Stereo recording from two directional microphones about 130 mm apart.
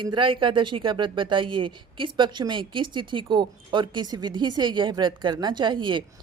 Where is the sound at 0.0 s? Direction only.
40° right (ahead or behind).